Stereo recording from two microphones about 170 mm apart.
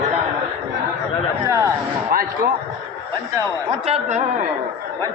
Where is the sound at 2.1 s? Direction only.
55° right (ahead or behind).